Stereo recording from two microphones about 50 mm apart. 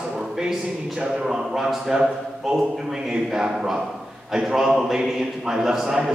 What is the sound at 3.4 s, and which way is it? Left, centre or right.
Speech, centre.